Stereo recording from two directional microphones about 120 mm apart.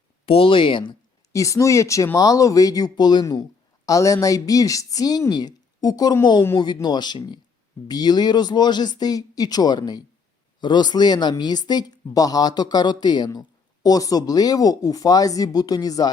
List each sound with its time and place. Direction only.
0.3 s speech: 50° left (ahead or behind)
1.3 s a woman's voice: 25° left (ahead or behind)